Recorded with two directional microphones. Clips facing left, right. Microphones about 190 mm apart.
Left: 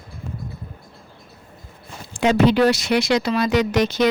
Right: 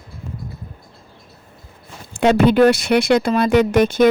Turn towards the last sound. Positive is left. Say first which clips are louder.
# right 5 dB
turn(degrees=-50)  # may be behind; listen again after turning